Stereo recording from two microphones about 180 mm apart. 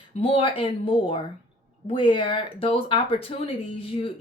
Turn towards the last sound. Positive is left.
turn(degrees=30)  # may be behind; listen again after turning